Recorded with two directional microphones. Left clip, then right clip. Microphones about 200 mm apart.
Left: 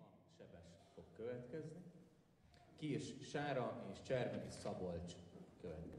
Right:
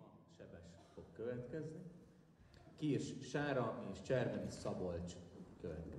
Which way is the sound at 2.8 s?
65° right (ahead or behind).